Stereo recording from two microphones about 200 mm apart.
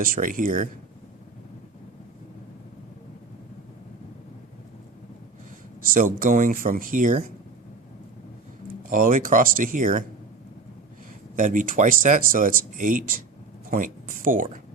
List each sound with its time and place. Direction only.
0.0 s speech: 45° right (ahead or behind)
5.8 s speech: 45° right (ahead or behind)
8.9 s speech: 45° right (ahead or behind)
11.3 s speech: 40° right (ahead or behind)